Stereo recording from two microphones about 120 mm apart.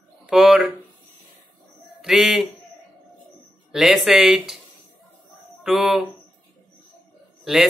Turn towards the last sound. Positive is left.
turn(degrees=-5)  # may be behind; listen again after turning